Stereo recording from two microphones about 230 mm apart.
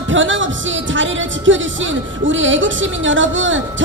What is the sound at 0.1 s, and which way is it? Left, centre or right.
Music, right.